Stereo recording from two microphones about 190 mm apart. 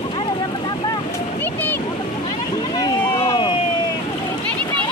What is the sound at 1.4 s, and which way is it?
Splash, 10° left (ahead or behind).